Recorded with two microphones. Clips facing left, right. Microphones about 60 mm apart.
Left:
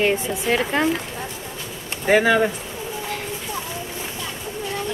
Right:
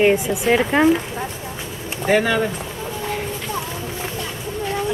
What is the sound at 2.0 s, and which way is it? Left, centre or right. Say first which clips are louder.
Speech: left 1 dB; centre.